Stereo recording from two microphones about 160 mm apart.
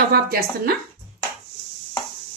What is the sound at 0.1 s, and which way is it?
Speech, 70° right (ahead or behind).